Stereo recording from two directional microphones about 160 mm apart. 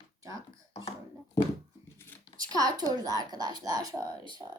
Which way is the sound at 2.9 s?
25° right (ahead or behind).